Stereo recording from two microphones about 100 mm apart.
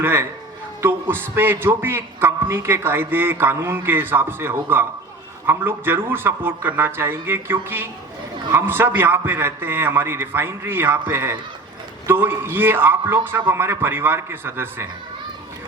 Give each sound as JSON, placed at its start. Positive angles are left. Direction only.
{"t": 0.0, "sound": "a man's voice", "side_deg": -25}